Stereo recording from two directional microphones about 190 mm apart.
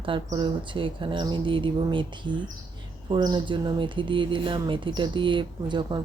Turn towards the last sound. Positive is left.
turn(degrees=-25)  # may be behind; listen again after turning